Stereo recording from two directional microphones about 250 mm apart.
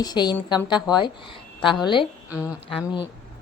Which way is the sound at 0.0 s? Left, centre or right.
Centre.